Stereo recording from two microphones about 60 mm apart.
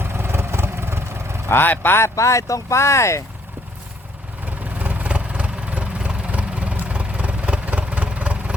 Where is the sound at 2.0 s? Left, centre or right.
Left.